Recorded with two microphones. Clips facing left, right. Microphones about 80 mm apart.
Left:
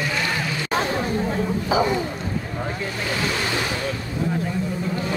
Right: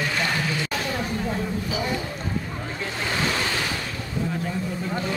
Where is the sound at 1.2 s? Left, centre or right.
Left.